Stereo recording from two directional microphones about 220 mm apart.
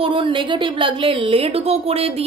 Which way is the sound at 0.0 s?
25° right (ahead or behind).